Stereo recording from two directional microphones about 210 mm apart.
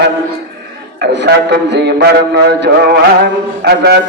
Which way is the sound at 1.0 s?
55° right (ahead or behind).